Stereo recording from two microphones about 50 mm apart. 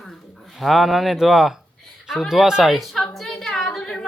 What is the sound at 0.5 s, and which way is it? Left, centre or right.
A man's voice, centre.